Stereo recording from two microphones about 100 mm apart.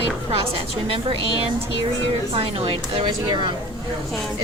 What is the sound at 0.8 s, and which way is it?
Speech, 70° right (ahead or behind).